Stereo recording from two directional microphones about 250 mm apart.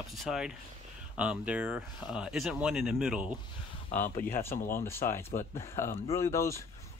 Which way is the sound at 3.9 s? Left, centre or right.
Left.